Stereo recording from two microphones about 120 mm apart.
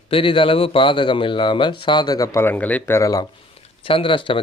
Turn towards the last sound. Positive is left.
turn(degrees=45)  # may be behind; listen again after turning